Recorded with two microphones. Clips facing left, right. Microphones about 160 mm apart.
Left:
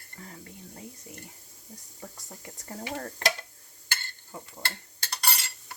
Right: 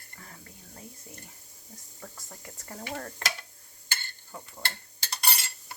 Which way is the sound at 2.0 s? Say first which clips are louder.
Left 1 dB; 25° left (ahead or behind).